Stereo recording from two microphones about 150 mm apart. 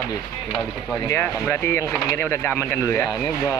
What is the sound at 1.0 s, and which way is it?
Speech, 10° left (ahead or behind).